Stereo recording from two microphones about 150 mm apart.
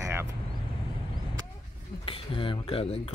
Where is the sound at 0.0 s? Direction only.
15° right (ahead or behind).